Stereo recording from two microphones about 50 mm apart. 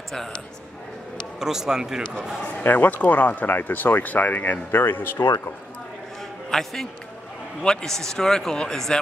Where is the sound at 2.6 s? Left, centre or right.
Left.